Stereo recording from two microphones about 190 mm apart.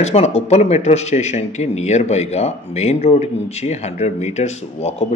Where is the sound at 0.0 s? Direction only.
35° left (ahead or behind).